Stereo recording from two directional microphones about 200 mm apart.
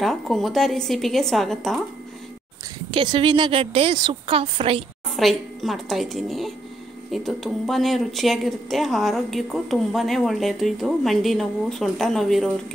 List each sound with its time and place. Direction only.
0.0 s speech: centre (ahead or behind)
2.9 s a woman's voice: 25° right (ahead or behind)
5.1 s speech: centre (ahead or behind)